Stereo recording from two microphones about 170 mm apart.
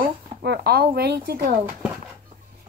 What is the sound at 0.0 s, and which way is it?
Speech, 70° right (ahead or behind).